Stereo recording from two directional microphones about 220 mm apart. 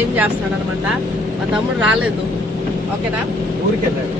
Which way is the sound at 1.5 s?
5° right (ahead or behind).